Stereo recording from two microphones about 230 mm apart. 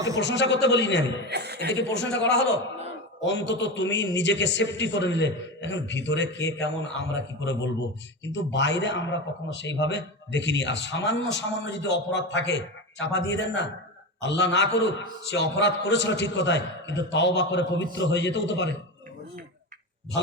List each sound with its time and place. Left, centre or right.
0.2 s speech: left
1.3 s chuckle: right
1.7 s speech: left